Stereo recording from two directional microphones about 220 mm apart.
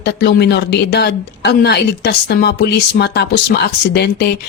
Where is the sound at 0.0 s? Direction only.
45° left (ahead or behind).